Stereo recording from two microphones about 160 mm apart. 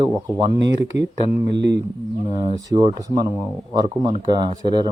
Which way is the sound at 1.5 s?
90° right.